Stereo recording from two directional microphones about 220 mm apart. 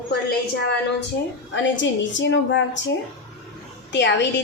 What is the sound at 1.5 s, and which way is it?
A woman's voice, 55° left (ahead or behind).